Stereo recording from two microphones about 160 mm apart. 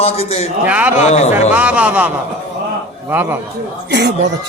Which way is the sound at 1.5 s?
10° right (ahead or behind).